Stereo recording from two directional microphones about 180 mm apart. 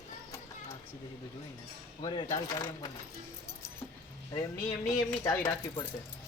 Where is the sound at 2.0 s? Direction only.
25° left (ahead or behind).